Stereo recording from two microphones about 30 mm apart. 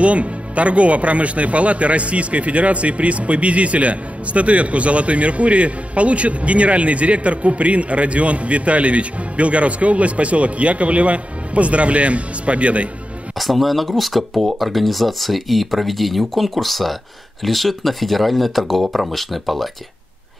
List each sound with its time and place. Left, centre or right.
0.0 s speech: right
13.4 s speech: centre